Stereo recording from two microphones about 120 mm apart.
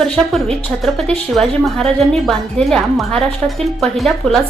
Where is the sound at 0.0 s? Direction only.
Centre (ahead or behind).